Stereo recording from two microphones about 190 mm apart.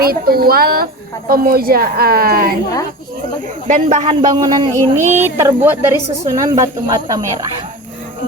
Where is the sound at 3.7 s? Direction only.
40° right (ahead or behind).